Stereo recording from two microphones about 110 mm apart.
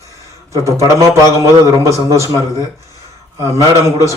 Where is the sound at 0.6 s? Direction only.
30° right (ahead or behind).